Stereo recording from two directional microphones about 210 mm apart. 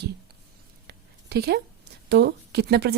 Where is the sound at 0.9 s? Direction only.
50° right (ahead or behind).